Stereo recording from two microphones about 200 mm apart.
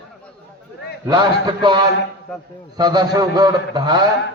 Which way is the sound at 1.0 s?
20° right (ahead or behind).